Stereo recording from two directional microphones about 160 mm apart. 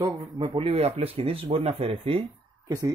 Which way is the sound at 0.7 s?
40° right (ahead or behind).